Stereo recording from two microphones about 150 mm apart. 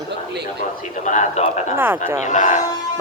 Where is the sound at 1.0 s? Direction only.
55° left (ahead or behind).